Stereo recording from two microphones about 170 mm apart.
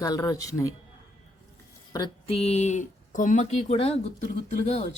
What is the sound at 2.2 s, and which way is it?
Speech, 35° left (ahead or behind).